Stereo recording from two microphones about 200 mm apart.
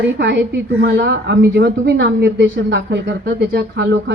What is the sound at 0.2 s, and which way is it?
A woman's voice, 60° right (ahead or behind).